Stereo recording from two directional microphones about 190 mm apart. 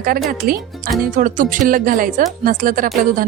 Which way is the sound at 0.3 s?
50° right (ahead or behind).